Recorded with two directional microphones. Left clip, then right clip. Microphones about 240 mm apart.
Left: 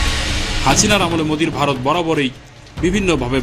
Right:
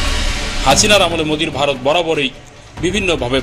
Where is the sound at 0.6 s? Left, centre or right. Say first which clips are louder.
Right 4 dB; left.